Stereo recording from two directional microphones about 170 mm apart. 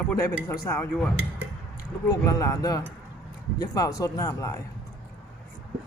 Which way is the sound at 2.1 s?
20° left (ahead or behind).